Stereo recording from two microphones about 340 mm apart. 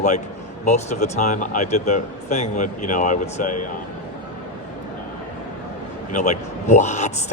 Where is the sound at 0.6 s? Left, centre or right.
Centre.